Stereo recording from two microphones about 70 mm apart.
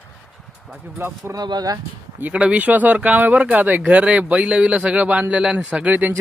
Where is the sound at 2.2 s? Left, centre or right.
Centre.